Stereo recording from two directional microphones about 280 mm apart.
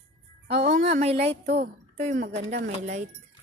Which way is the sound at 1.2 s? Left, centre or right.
Right.